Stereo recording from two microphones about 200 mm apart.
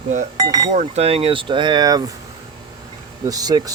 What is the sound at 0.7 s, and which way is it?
Speech, 35° right (ahead or behind).